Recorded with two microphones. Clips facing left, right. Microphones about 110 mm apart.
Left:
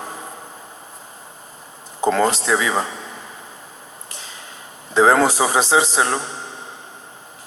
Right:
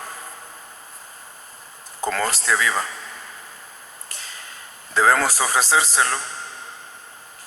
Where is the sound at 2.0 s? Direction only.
20° left (ahead or behind).